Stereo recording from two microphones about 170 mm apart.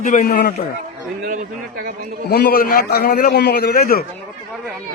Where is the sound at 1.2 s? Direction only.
55° right (ahead or behind).